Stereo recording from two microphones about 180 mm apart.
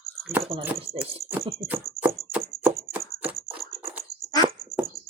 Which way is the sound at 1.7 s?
10° right (ahead or behind).